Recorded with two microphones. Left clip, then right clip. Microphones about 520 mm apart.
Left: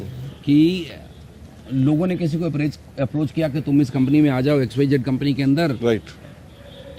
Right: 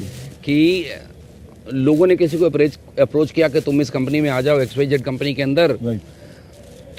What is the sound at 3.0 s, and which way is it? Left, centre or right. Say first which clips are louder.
Speech: right 8 dB; right.